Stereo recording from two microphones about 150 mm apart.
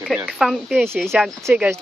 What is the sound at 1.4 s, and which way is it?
Speech, 15° right (ahead or behind).